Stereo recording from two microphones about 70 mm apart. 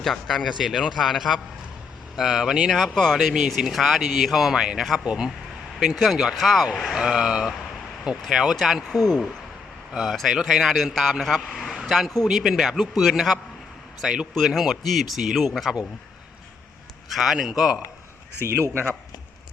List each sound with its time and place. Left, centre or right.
0.0 s speech: centre
5.8 s speech: centre
17.1 s speech: centre
18.4 s speech: right